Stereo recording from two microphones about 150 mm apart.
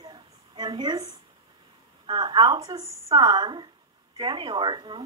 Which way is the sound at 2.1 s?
30° right (ahead or behind).